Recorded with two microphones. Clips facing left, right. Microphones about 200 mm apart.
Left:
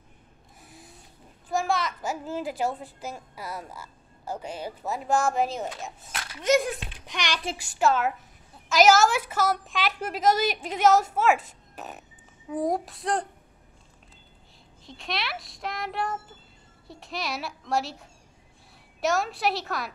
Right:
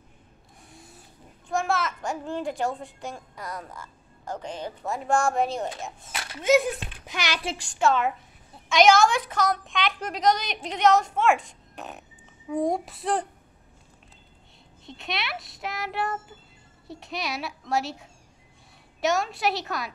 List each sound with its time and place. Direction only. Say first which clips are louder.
0.7 s a sound: even; centre (ahead or behind)
1.5 s a child's voice: even; centre (ahead or behind)
7.5 s a child's voice: even; 5° left (ahead or behind)
14.9 s a child's voice: even; centre (ahead or behind)